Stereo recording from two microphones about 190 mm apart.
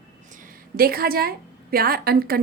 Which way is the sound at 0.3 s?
50° right (ahead or behind).